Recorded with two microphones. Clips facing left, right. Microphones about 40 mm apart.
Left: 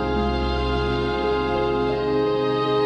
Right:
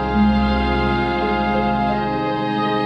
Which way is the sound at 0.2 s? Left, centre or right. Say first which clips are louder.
Right 6 dB; right.